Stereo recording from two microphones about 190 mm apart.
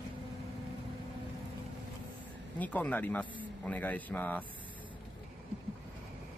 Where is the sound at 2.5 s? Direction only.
10° left (ahead or behind).